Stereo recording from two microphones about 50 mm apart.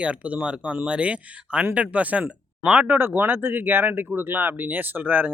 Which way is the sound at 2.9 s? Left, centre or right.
Right.